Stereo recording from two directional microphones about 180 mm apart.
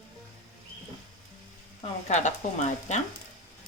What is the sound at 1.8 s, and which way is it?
Speech, 40° left (ahead or behind).